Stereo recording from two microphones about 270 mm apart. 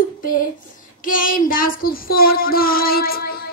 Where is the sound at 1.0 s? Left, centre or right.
Left.